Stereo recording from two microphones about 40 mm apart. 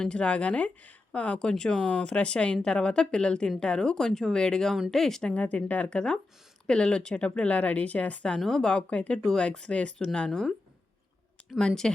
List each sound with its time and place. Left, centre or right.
0.0 s speech: left
1.4 s speech: centre
5.3 s speech: left
5.9 s speech: left
11.6 s speech: centre